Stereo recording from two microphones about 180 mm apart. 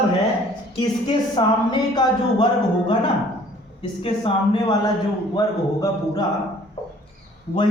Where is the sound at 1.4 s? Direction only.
25° left (ahead or behind).